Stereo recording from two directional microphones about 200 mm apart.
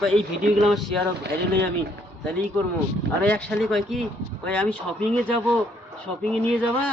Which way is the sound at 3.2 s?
5° left (ahead or behind).